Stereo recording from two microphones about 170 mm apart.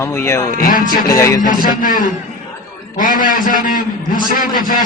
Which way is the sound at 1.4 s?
55° left (ahead or behind).